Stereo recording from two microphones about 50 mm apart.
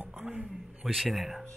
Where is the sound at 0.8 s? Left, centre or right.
Centre.